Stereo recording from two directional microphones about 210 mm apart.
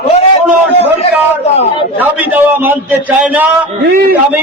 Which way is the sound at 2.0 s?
10° right (ahead or behind).